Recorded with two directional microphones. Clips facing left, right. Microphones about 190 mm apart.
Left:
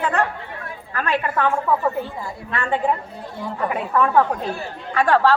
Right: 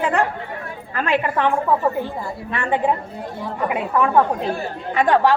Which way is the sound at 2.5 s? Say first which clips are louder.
Right 1 dB; 15° right (ahead or behind).